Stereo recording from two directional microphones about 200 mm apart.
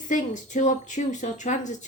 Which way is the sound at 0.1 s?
40° left (ahead or behind).